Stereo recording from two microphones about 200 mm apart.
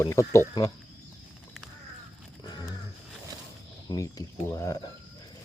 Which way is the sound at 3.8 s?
15° left (ahead or behind).